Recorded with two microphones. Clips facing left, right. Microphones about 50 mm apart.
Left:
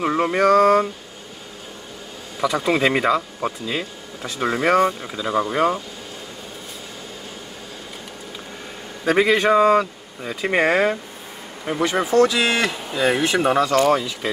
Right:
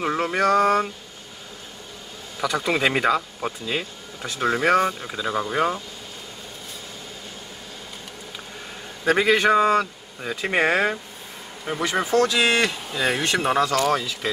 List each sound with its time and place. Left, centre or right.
0.2 s mantra: centre
2.4 s speech: centre
5.2 s mantra: centre
9.0 s speech: centre